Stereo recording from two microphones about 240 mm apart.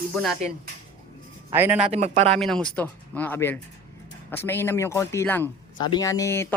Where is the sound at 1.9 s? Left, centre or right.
Right.